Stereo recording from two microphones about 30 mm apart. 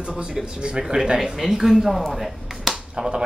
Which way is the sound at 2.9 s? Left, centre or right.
Right.